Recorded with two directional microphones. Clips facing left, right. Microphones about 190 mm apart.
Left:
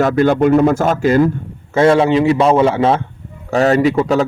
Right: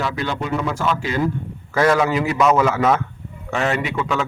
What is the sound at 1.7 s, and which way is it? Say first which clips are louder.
A man's voice: left 6 dB; 25° left (ahead or behind).